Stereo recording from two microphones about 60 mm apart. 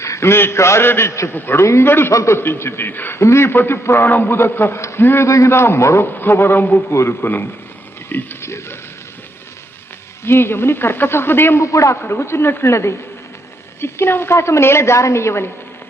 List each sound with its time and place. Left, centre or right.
0.0 s a woman's voice: left
1.3 s a woman's voice: left
2.1 s speech: left
3.2 s a woman's voice: left
6.1 s speech: left
8.4 s speech: left
10.2 s speech: left
11.6 s a man's voice: left
11.9 s a woman's voice: left